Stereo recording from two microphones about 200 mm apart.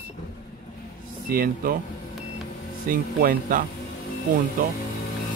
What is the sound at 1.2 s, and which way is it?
Speech, 45° right (ahead or behind).